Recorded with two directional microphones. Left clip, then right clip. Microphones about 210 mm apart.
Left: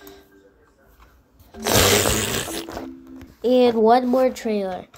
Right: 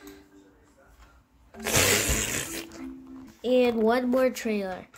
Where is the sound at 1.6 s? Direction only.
20° left (ahead or behind).